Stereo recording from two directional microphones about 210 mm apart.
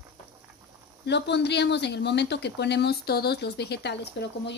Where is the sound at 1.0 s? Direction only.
55° left (ahead or behind).